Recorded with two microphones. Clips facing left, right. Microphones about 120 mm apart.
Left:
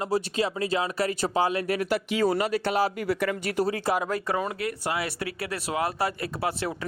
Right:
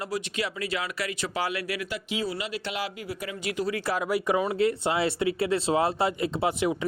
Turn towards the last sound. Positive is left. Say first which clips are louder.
# right 4 dB
turn(degrees=-20)  # may be behind; listen again after turning